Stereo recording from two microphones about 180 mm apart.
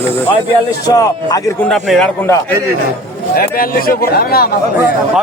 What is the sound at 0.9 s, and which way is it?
Speech, 20° left (ahead or behind).